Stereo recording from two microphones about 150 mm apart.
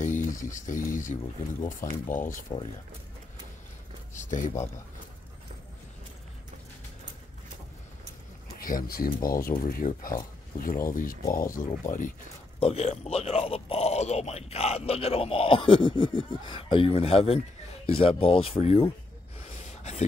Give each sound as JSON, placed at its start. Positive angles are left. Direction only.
{"t": 0.0, "sound": "a sound", "side_deg": 60}
{"t": 1.6, "sound": "speech", "side_deg": 60}
{"t": 4.2, "sound": "speech", "side_deg": 55}
{"t": 8.5, "sound": "speech", "side_deg": 70}
{"t": 9.8, "sound": "speech", "side_deg": 55}
{"t": 10.6, "sound": "speech", "side_deg": 70}
{"t": 12.5, "sound": "speech", "side_deg": 40}
{"t": 19.8, "sound": "a sound", "side_deg": 50}